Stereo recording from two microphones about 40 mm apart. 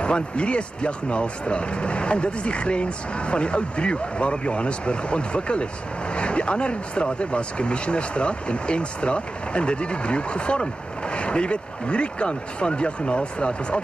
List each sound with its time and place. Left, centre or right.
0.0 s speech: left